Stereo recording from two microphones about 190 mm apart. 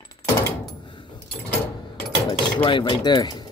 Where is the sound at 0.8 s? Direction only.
25° left (ahead or behind).